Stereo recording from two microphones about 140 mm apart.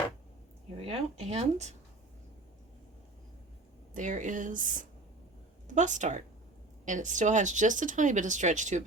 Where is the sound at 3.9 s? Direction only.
65° right (ahead or behind).